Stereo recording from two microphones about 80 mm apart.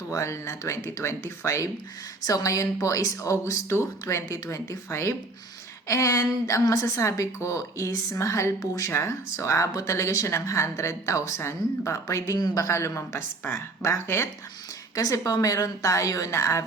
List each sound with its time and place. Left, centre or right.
0.1 s a woman's voice: left
14.9 s a woman's voice: left